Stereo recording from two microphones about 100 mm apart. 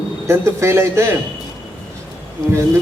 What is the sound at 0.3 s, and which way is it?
Speech, 25° right (ahead or behind).